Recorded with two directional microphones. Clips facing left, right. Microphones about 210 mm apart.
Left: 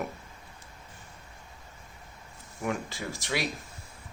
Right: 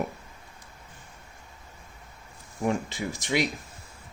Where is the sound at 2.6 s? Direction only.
25° right (ahead or behind).